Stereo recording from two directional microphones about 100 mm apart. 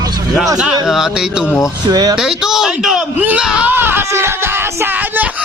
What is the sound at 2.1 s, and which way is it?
Speech, 5° right (ahead or behind).